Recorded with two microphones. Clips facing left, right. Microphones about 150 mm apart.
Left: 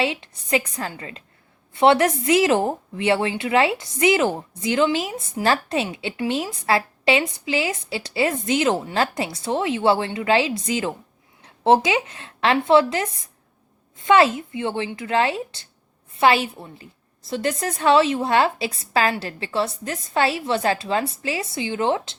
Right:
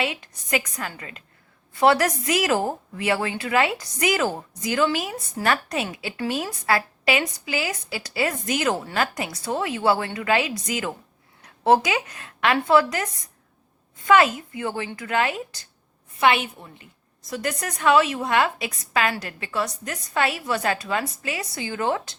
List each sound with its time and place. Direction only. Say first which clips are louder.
0.0 s a woman's voice: left 4 dB; 30° left (ahead or behind)